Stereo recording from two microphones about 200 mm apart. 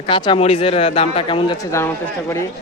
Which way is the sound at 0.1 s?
25° left (ahead or behind).